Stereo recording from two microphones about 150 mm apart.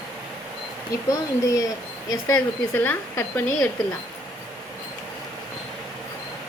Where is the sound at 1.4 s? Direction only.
25° left (ahead or behind).